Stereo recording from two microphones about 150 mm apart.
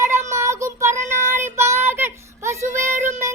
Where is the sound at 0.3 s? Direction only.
20° right (ahead or behind).